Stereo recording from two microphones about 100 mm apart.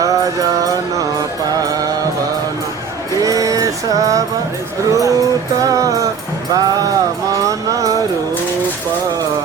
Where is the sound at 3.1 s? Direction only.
35° right (ahead or behind).